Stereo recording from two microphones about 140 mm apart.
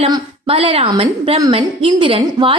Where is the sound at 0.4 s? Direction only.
40° right (ahead or behind).